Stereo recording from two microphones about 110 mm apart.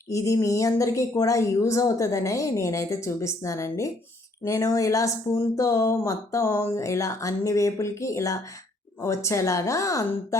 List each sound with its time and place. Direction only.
0.1 s speech: 30° left (ahead or behind)